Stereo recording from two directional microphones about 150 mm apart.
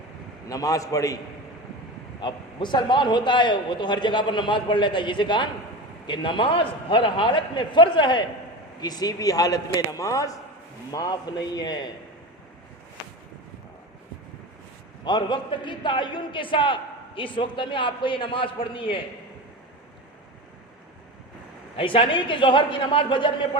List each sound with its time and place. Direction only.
0.4 s a man's voice: 25° left (ahead or behind)
2.2 s a man's voice: 30° left (ahead or behind)
15.0 s a man's voice: 30° left (ahead or behind)
21.8 s a man's voice: 35° left (ahead or behind)